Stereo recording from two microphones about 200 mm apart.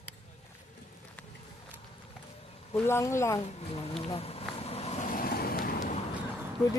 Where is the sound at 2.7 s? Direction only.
10° left (ahead or behind).